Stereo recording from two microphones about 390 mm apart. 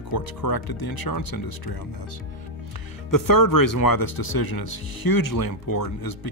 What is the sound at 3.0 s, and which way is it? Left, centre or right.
Speech, left.